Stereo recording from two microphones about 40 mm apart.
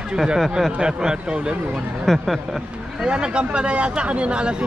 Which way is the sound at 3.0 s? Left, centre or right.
Right.